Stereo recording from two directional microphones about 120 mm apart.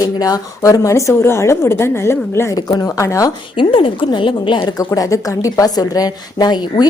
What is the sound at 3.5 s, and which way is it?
A woman's voice, 45° left (ahead or behind).